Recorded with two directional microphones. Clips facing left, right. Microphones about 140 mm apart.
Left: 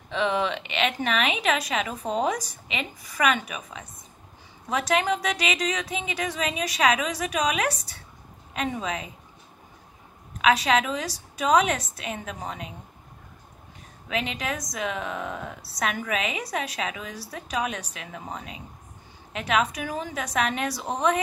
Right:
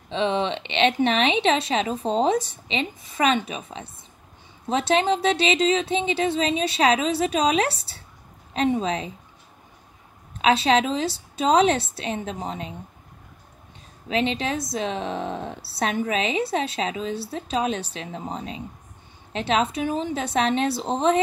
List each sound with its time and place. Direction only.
0.1 s a woman's voice: 25° right (ahead or behind)
10.4 s a woman's voice: 30° right (ahead or behind)
14.0 s a woman's voice: 30° right (ahead or behind)